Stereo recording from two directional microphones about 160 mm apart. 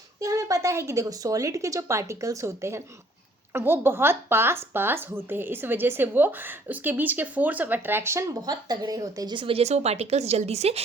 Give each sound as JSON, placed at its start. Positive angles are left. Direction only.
{"t": 0.2, "sound": "a woman's voice", "side_deg": -20}